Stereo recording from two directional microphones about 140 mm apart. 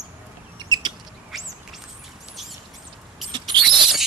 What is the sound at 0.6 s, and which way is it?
Chicken, 30° right (ahead or behind).